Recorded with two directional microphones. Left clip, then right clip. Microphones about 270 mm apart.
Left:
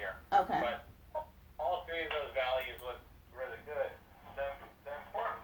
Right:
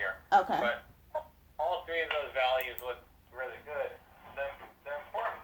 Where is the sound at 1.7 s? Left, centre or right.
Right.